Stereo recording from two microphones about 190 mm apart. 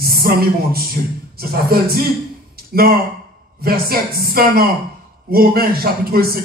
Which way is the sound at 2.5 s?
55° right (ahead or behind).